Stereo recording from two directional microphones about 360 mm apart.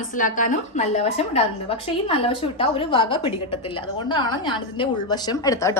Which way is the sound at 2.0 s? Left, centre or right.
Centre.